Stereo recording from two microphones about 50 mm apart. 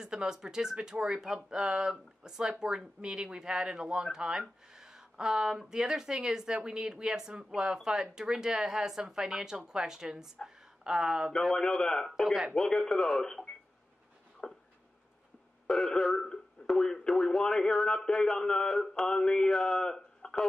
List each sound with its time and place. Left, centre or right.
0.0 s speech: centre
11.4 s speech: centre
14.4 s a sound: centre
15.6 s speech: centre